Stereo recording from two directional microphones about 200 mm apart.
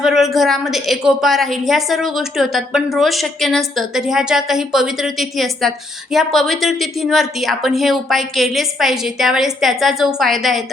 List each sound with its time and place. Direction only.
0.0 s a woman's voice: centre (ahead or behind)